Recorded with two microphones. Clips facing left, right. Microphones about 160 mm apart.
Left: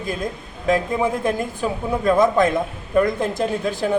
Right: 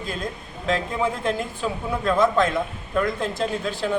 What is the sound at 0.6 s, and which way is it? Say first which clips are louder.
Speech: left 4 dB; 15° left (ahead or behind).